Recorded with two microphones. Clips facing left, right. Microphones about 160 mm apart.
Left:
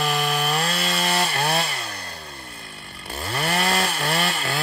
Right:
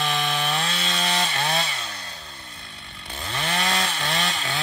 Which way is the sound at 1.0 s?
50° left (ahead or behind).